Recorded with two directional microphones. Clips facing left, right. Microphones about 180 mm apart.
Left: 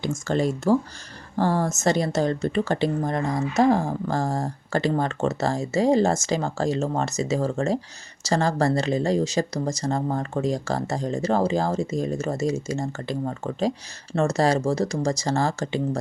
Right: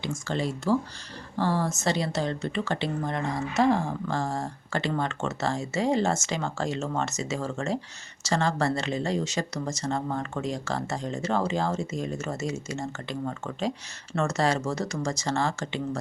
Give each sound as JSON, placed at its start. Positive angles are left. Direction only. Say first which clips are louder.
{"t": 0.0, "sound": "speech", "louder": "left 6 dB", "side_deg": 45}